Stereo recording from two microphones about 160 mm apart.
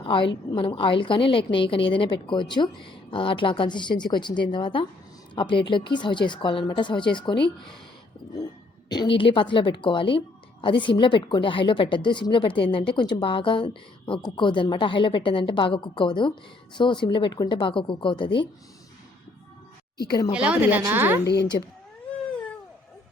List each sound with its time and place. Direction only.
0.0 s a woman's voice: 30° left (ahead or behind)
8.9 s a woman's voice: 30° left (ahead or behind)
20.3 s a woman's voice: 10° right (ahead or behind)